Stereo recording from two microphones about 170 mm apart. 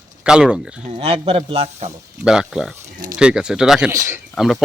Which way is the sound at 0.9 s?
35° right (ahead or behind).